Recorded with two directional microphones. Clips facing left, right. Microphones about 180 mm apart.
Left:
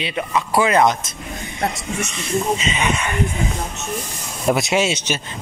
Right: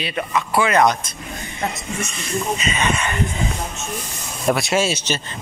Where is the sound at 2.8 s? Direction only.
15° left (ahead or behind).